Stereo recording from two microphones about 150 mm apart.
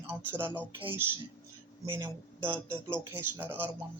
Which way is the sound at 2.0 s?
15° right (ahead or behind).